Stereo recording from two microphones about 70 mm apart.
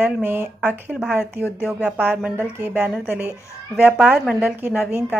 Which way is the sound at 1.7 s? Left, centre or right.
Centre.